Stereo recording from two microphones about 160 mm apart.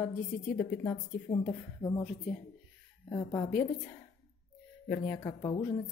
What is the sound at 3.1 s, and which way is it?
Speech, 20° left (ahead or behind).